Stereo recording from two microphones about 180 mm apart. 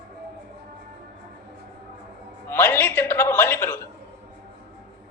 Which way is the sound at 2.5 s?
10° left (ahead or behind).